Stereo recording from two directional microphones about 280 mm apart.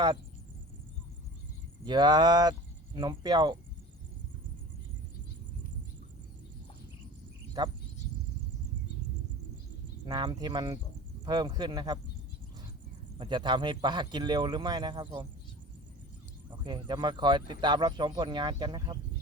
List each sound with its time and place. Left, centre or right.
1.8 s speech: centre
10.1 s speech: centre
13.1 s speech: centre
16.5 s speech: centre